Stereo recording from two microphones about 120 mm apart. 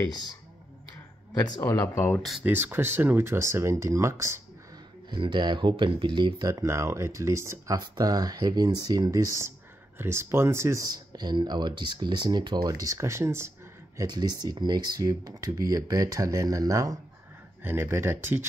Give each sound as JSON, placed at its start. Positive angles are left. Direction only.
{"t": 1.6, "sound": "speech", "side_deg": 20}
{"t": 2.4, "sound": "speech", "side_deg": -15}
{"t": 5.1, "sound": "speech", "side_deg": -40}
{"t": 6.5, "sound": "speech", "side_deg": -25}
{"t": 13.9, "sound": "speech", "side_deg": -35}